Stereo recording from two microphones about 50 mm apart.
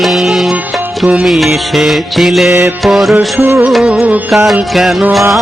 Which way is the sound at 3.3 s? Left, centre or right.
Right.